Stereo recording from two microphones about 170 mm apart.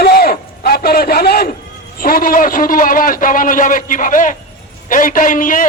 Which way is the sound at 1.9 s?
60° left (ahead or behind).